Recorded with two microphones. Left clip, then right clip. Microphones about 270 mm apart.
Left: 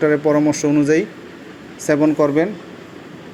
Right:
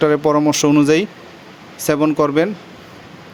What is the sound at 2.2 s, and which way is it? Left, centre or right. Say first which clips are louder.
Speech: right 1 dB; right.